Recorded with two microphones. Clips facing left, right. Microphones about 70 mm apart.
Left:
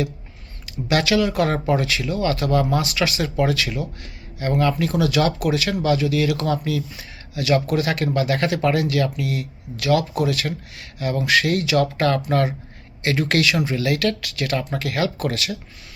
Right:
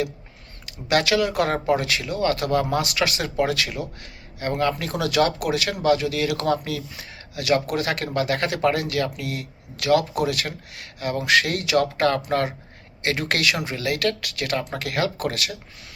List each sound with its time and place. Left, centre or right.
0.9 s speech: right
13.0 s speech: right